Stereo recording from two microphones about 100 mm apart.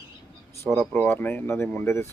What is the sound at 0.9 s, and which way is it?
Speech, 20° left (ahead or behind).